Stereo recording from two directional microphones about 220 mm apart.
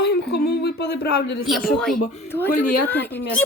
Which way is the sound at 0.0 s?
45° left (ahead or behind).